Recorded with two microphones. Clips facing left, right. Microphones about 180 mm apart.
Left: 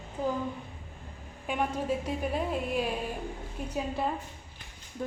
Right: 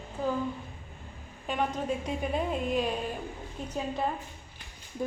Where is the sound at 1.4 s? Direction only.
10° left (ahead or behind).